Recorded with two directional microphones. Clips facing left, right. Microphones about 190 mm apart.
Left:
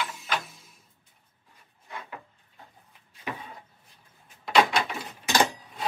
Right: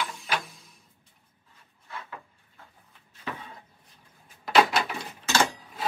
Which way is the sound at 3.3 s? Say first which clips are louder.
Left 1 dB; 15° left (ahead or behind).